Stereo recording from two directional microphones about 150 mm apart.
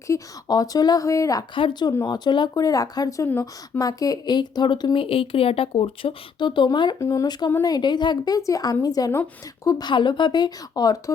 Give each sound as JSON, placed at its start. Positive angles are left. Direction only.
{"t": 0.1, "sound": "speech", "side_deg": 25}
{"t": 1.5, "sound": "speech", "side_deg": 35}
{"t": 1.9, "sound": "speech", "side_deg": 25}